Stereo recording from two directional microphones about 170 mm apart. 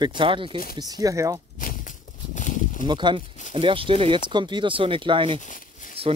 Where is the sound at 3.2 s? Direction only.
45° left (ahead or behind).